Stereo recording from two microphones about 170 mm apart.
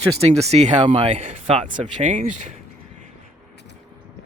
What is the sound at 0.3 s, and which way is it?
Speech, 40° right (ahead or behind).